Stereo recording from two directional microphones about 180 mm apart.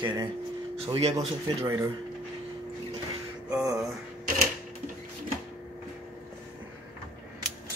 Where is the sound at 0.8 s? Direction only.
35° right (ahead or behind).